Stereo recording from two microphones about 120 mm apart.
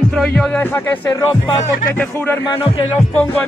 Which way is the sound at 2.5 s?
45° left (ahead or behind).